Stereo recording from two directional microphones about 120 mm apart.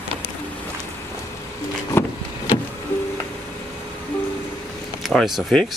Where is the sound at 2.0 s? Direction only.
20° left (ahead or behind).